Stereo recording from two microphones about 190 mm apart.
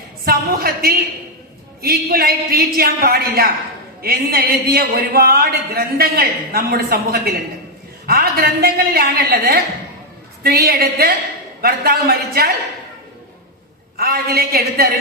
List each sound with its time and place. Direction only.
0.3 s speech: 55° right (ahead or behind)
13.9 s speech: 50° right (ahead or behind)